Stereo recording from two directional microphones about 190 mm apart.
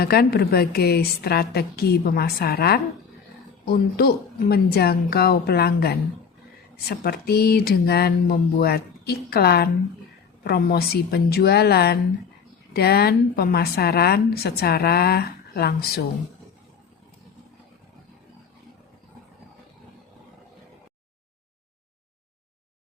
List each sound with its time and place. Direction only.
0.0 s a woman's voice: 55° left (ahead or behind)